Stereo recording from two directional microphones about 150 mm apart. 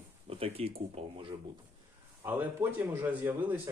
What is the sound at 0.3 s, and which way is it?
Speech, 40° right (ahead or behind).